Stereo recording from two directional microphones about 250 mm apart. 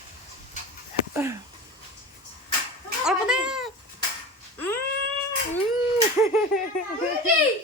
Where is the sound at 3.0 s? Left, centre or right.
Centre.